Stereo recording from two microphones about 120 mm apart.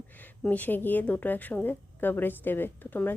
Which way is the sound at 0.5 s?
15° left (ahead or behind).